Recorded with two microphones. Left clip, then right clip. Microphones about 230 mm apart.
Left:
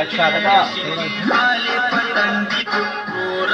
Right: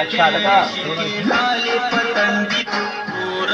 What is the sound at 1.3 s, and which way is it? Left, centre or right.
Music, right.